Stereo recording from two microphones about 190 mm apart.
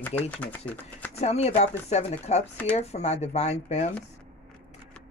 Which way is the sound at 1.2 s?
35° left (ahead or behind).